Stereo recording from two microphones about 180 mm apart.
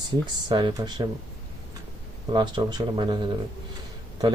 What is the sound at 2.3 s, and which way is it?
Speech, 25° right (ahead or behind).